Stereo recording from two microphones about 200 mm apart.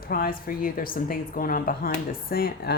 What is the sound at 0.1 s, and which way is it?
Speech, 45° left (ahead or behind).